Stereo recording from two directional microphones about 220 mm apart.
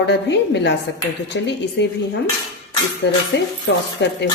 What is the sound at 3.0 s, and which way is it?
A woman's voice, 50° left (ahead or behind).